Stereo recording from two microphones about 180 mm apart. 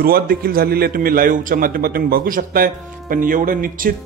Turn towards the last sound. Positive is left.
turn(degrees=-50)  # may be behind; listen again after turning